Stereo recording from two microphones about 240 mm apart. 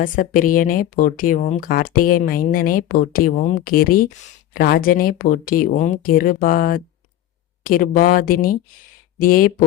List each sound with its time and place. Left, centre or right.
0.0 s speech: left